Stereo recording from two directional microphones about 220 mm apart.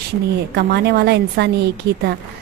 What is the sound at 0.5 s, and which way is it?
Speech, 45° right (ahead or behind).